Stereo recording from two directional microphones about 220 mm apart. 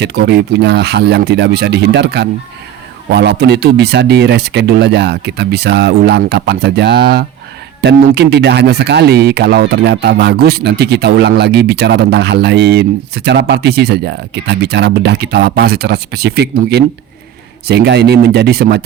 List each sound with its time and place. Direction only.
0.0 s speech: 50° right (ahead or behind)